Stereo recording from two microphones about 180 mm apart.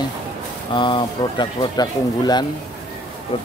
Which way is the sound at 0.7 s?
25° left (ahead or behind).